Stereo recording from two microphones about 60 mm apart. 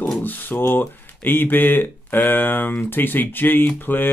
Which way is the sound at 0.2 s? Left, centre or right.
Left.